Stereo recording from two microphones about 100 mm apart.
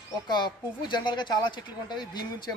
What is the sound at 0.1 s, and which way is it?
Speech, 45° left (ahead or behind).